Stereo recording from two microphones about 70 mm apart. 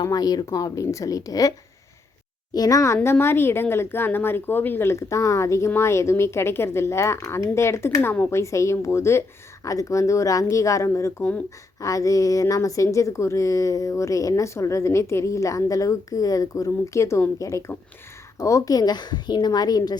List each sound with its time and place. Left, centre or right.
0.0 s a woman's voice: left
0.5 s a woman's voice: left
8.3 s a woman's voice: left
9.6 s a woman's voice: left